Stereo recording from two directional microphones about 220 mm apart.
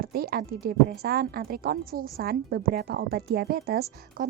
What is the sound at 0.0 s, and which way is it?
Speech, 45° right (ahead or behind).